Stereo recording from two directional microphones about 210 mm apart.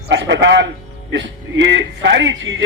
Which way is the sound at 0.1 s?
55° right (ahead or behind).